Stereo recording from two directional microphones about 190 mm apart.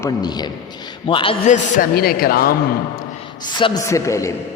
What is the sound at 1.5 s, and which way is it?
A man's voice, 50° left (ahead or behind).